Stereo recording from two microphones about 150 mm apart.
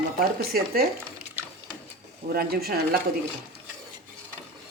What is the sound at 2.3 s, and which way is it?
Speech, 85° right.